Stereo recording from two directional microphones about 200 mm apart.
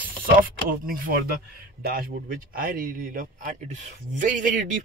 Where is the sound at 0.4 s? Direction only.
45° right (ahead or behind).